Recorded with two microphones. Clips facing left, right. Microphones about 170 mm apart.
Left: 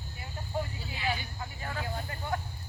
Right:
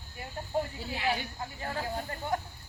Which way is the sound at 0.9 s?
70° right (ahead or behind).